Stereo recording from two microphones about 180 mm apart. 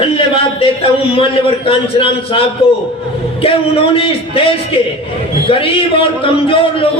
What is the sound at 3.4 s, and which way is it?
A man's voice, 30° left (ahead or behind).